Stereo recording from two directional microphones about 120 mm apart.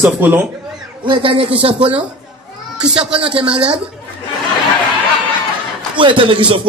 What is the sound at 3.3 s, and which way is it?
Speech, 50° right (ahead or behind).